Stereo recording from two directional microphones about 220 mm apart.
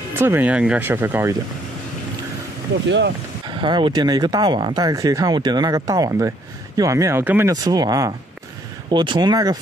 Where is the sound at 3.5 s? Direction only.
20° right (ahead or behind).